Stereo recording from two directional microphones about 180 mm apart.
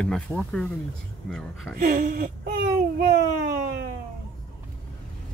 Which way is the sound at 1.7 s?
50° right (ahead or behind).